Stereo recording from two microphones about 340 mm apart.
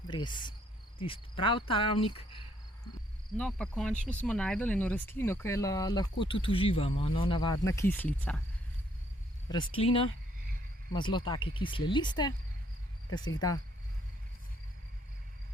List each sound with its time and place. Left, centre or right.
0.1 s speech: centre
3.3 s insect: centre
4.0 s speech: centre
7.8 s insect: centre
9.5 s speech: centre